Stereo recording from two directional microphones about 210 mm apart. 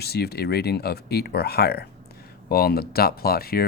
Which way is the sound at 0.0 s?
50° left (ahead or behind).